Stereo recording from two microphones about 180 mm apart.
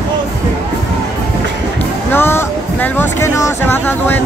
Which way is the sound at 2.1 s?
15° left (ahead or behind).